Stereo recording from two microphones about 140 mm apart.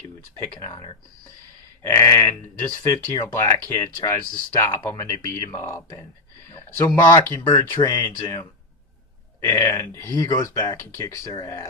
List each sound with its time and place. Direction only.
0.6 s speech: 25° left (ahead or behind)
7.4 s speech: 35° left (ahead or behind)
7.9 s speech: 20° left (ahead or behind)